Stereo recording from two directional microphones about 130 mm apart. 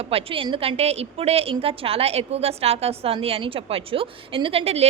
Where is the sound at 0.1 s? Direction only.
45° right (ahead or behind).